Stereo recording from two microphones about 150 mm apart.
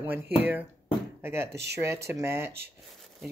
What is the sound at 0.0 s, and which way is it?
Speech, 15° right (ahead or behind).